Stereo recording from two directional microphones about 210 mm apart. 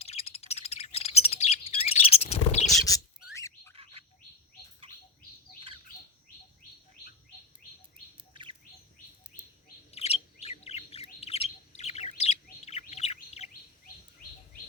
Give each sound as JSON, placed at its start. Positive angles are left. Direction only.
{"t": 0.0, "sound": "bird", "side_deg": 30}
{"t": 2.9, "sound": "rodents", "side_deg": 15}
{"t": 3.3, "sound": "bird", "side_deg": 15}
{"t": 5.5, "sound": "bird", "side_deg": -25}
{"t": 9.9, "sound": "bird", "side_deg": 30}